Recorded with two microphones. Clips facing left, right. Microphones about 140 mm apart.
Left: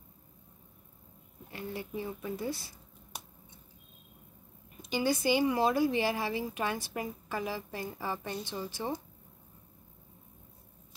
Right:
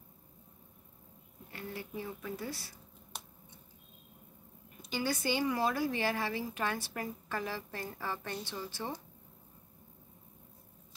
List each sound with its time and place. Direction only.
1.5 s speech: 25° left (ahead or behind)
4.8 s a woman's voice: 15° left (ahead or behind)